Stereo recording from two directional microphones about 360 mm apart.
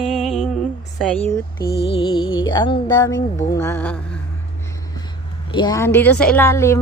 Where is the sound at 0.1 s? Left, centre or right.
Centre.